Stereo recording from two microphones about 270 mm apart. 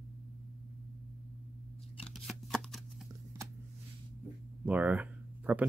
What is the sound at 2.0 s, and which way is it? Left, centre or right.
Shuffling cards, centre.